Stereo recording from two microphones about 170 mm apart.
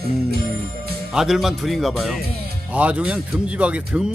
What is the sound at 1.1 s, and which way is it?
Speech, centre (ahead or behind).